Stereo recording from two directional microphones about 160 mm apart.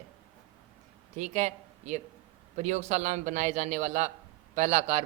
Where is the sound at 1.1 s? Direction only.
50° right (ahead or behind).